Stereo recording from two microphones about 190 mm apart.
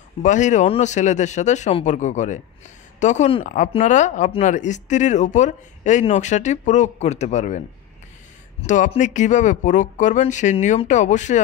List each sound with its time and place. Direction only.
0.2 s speech: 40° left (ahead or behind)